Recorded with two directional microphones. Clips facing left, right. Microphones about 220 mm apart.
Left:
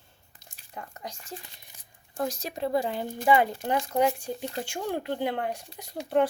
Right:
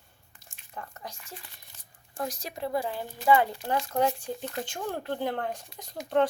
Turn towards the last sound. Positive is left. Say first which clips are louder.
# left 1 dB
turn(degrees=10)  # may be behind; listen again after turning